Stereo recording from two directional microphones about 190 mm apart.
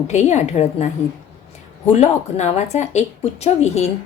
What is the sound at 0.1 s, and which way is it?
Speech, 35° left (ahead or behind).